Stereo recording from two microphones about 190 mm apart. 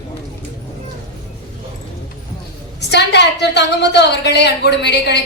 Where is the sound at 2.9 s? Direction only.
65° left (ahead or behind).